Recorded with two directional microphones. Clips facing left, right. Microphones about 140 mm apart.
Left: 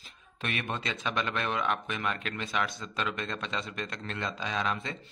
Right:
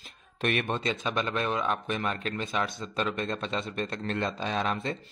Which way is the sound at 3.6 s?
30° right (ahead or behind).